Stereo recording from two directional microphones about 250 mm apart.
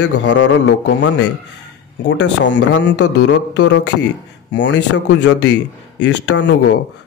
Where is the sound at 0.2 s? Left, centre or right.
Left.